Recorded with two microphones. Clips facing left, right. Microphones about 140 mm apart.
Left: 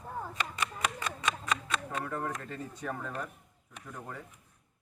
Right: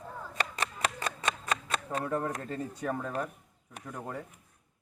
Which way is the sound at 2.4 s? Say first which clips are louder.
Right 4 dB; 35° right (ahead or behind).